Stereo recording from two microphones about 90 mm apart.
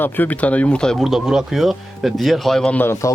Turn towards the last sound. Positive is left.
turn(degrees=30)  # may be behind; listen again after turning